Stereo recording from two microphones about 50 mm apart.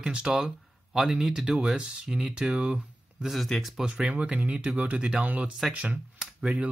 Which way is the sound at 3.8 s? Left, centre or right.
Right.